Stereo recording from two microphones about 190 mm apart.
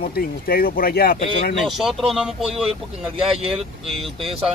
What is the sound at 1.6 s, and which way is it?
Speech, centre (ahead or behind).